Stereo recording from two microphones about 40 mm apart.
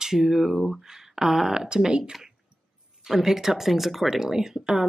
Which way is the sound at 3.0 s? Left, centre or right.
Centre.